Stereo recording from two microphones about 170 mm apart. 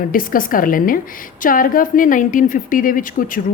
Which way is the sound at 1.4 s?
55° left (ahead or behind).